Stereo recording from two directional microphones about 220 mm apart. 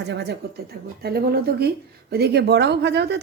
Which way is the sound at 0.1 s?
50° right (ahead or behind).